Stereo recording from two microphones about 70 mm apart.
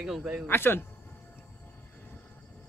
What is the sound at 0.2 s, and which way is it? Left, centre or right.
Speech, centre.